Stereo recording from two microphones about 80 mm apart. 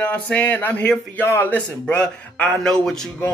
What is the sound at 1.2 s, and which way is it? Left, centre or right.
Speech, left.